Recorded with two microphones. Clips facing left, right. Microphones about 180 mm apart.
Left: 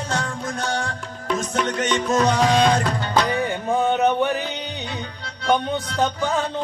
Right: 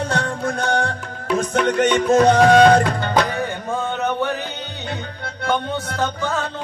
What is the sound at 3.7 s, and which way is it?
Speech, 15° left (ahead or behind).